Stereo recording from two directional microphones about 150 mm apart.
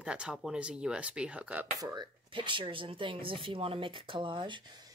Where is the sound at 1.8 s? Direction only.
30° right (ahead or behind).